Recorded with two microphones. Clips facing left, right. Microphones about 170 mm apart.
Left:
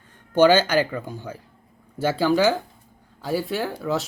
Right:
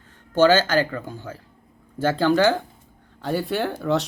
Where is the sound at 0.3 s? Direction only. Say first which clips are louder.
Left 1 dB; 15° left (ahead or behind).